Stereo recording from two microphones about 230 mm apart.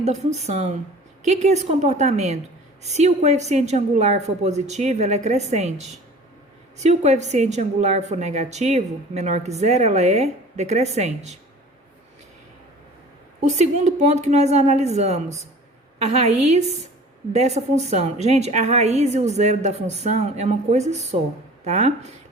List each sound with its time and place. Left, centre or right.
0.0 s a woman's voice: right
13.6 s a woman's voice: right
17.3 s a woman's voice: right